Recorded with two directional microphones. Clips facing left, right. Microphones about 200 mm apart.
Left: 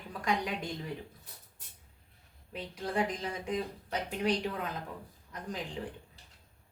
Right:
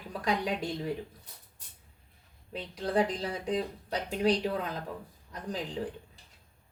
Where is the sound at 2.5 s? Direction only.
35° right (ahead or behind).